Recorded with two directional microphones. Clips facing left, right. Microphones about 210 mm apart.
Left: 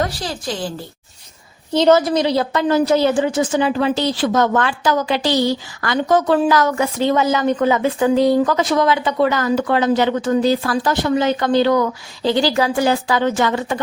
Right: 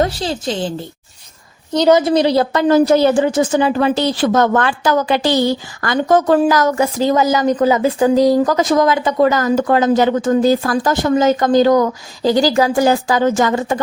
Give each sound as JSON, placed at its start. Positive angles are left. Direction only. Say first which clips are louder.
{"t": 0.0, "sound": "a woman's voice", "louder": "right 5 dB", "side_deg": -25}
{"t": 1.9, "sound": "a woman's voice", "louder": "right 2 dB", "side_deg": -20}
{"t": 2.1, "sound": "a woman's voice", "louder": "right 4 dB", "side_deg": -40}